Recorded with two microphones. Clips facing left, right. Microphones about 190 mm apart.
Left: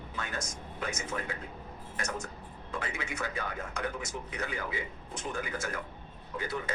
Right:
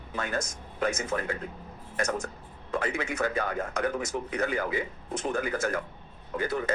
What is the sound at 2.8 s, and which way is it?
Speech, 50° right (ahead or behind).